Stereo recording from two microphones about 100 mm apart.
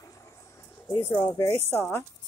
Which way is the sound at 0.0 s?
30° left (ahead or behind).